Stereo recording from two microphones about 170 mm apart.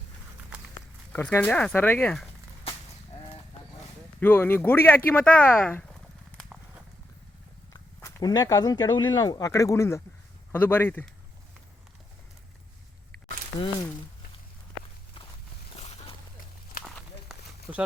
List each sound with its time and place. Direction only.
1.1 s speech: 10° left (ahead or behind)
4.2 s speech: 15° left (ahead or behind)
7.7 s speech: 20° left (ahead or behind)
13.5 s speech: 30° left (ahead or behind)
15.8 s a sound: 40° left (ahead or behind)
16.8 s walk: centre (ahead or behind)
17.7 s speech: 10° right (ahead or behind)